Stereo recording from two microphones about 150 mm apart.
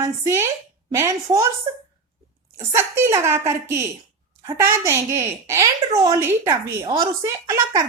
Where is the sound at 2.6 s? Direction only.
15° right (ahead or behind).